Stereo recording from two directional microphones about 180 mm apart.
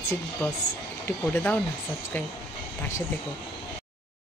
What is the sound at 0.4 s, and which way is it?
Speech, 10° left (ahead or behind).